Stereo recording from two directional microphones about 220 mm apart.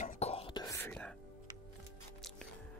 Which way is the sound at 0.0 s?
30° left (ahead or behind).